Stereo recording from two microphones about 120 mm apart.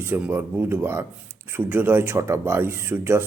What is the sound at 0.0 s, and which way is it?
Speech, 15° right (ahead or behind).